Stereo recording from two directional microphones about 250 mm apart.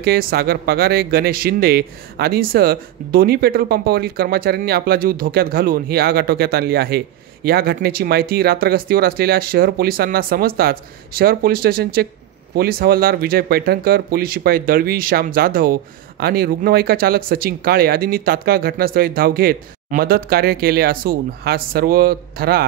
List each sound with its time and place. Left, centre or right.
0.0 s speech: right